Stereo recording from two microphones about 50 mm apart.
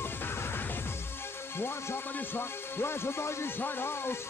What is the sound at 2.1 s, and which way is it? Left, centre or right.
Music, left.